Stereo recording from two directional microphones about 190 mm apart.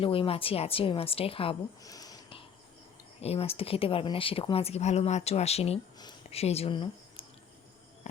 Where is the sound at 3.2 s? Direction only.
30° left (ahead or behind).